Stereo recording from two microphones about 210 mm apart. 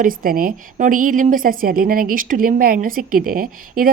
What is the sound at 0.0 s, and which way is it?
A woman's voice, 40° right (ahead or behind).